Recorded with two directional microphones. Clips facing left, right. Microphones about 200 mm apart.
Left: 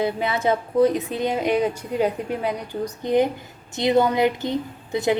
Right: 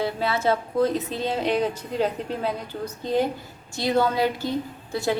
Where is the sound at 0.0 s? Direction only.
15° left (ahead or behind).